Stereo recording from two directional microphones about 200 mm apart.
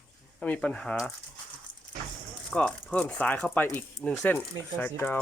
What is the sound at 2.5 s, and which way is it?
Speech, 5° left (ahead or behind).